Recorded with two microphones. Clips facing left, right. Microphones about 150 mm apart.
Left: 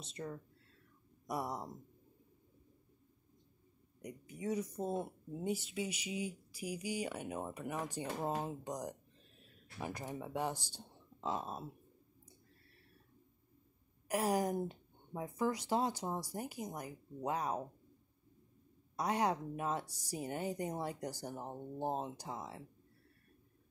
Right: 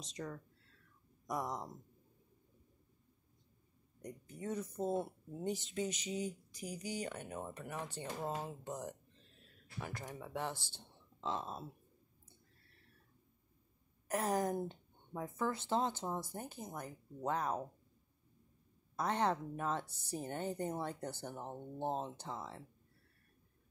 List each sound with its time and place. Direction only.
1.2 s speech: 10° left (ahead or behind)
4.0 s speech: 10° left (ahead or behind)
14.0 s speech: 10° left (ahead or behind)
18.9 s speech: 10° left (ahead or behind)